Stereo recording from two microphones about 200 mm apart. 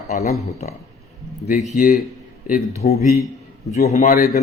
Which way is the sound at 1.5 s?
40° left (ahead or behind).